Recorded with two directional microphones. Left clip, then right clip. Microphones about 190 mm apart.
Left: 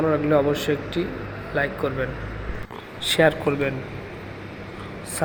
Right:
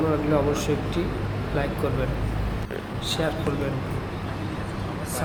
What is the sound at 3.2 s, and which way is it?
Speech, 30° left (ahead or behind).